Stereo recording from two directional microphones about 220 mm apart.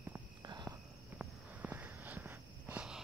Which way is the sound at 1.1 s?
5° right (ahead or behind).